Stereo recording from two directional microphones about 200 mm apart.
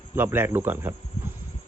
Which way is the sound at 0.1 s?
10° right (ahead or behind).